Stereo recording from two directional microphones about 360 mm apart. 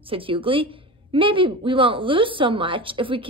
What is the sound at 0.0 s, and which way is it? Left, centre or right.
A woman's voice, centre.